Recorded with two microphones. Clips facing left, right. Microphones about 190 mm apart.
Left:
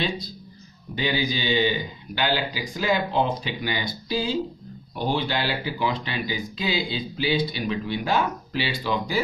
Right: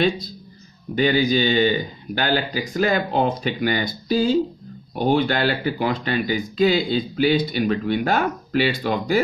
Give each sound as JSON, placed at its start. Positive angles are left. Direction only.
{"t": 0.9, "sound": "speech", "side_deg": -50}